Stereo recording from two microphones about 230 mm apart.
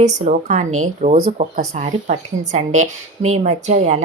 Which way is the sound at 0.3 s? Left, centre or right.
Right.